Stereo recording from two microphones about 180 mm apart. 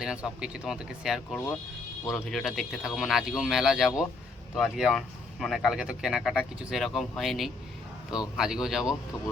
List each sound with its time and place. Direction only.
0.0 s speech: 5° right (ahead or behind)